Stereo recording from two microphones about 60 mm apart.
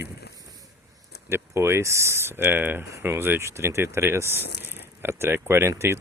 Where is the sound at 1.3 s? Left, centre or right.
Right.